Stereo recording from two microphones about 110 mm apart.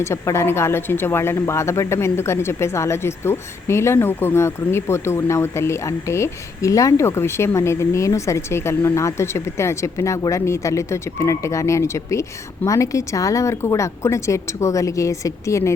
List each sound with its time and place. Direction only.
0.0 s speech: 25° left (ahead or behind)